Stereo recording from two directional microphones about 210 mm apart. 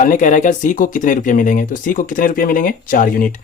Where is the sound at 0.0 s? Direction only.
40° left (ahead or behind).